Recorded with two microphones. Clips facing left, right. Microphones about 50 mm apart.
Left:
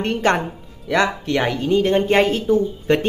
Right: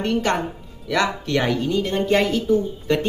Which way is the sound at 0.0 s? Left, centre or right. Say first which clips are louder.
Left 2 dB; left.